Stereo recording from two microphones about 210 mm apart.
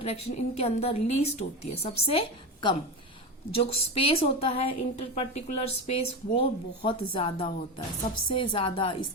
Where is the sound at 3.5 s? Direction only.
25° left (ahead or behind).